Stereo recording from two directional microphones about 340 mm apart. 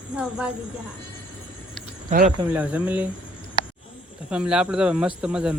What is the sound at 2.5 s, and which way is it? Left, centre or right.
Speech, centre.